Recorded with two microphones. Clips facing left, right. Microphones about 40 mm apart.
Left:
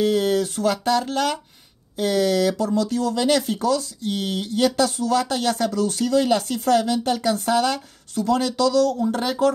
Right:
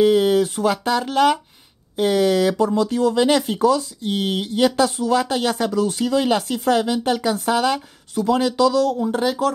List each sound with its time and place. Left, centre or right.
0.0 s speech: centre